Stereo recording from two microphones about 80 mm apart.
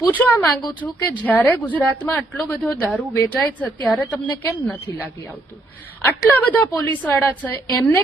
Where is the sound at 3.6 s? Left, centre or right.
Centre.